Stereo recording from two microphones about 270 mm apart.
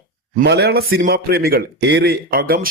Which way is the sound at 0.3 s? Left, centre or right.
Right.